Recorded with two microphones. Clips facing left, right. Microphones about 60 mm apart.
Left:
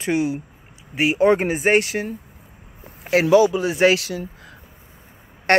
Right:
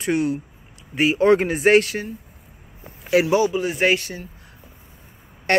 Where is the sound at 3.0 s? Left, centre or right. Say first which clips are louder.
Even; left.